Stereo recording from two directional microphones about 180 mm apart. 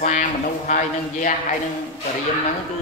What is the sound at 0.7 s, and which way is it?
Speech, 45° left (ahead or behind).